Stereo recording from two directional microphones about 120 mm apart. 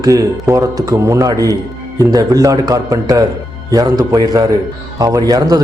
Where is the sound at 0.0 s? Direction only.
30° right (ahead or behind).